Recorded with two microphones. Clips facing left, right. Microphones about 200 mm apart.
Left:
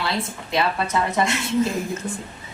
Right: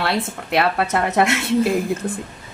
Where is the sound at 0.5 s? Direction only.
65° right (ahead or behind).